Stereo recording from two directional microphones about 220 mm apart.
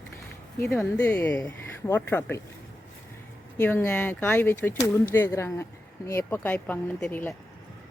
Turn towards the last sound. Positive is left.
turn(degrees=10)  # may be behind; listen again after turning